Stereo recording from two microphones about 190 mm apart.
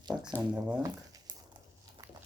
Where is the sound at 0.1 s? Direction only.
5° right (ahead or behind).